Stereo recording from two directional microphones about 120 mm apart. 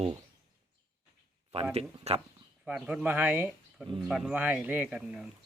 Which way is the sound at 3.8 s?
Centre (ahead or behind).